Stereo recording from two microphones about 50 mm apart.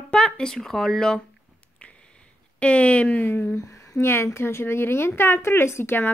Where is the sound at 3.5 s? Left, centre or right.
Left.